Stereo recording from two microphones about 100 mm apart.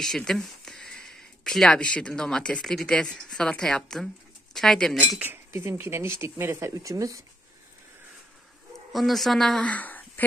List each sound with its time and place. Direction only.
0.0 s speech: 5° left (ahead or behind)
5.2 s speech: 25° right (ahead or behind)
8.9 s speech: centre (ahead or behind); by 10.2 s 15° left (ahead or behind)